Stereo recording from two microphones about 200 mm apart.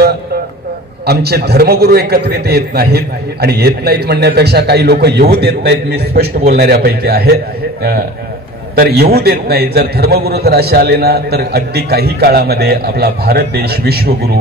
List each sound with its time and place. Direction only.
1.0 s a man's voice: 55° right (ahead or behind)
8.7 s a man's voice: 50° right (ahead or behind)